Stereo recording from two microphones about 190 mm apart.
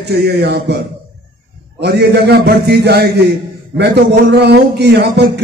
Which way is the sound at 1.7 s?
60° right (ahead or behind).